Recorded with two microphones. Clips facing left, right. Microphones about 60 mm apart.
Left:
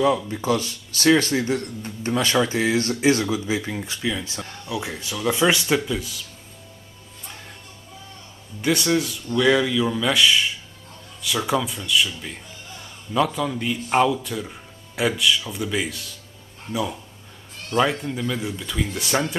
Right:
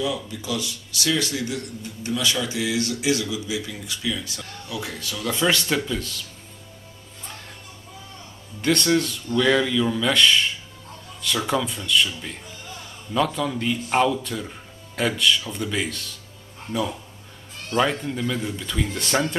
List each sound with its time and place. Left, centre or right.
0.0 s speech: left; by 6.2 s centre
8.5 s speech: centre
17.6 s speech: centre